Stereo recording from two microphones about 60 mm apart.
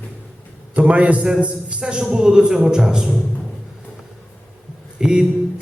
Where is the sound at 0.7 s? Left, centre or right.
Right.